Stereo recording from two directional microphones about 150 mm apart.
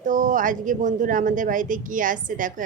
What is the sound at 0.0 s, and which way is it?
Speech, 60° right (ahead or behind).